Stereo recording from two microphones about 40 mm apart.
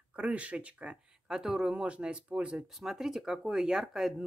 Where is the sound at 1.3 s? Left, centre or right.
Centre; by 2.6 s right.